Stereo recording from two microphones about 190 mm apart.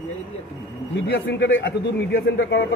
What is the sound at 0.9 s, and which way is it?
A man's voice, 70° left (ahead or behind).